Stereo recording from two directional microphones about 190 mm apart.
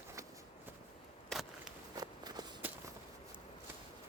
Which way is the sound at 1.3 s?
Centre (ahead or behind).